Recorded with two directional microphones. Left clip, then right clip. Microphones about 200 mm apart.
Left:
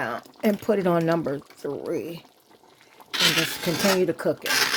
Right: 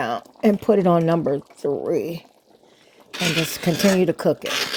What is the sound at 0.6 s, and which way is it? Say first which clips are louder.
Speech: right 5 dB; 20° right (ahead or behind).